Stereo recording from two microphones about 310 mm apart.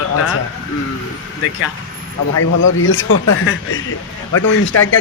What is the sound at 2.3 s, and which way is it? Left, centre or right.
A man's voice, left.